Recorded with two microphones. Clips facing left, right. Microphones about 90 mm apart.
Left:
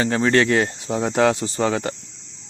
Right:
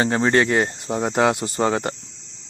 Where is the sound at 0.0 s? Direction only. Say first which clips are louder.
Even; 25° right (ahead or behind).